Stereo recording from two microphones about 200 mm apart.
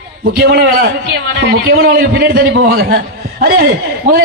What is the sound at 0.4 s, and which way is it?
A man's voice, 50° right (ahead or behind).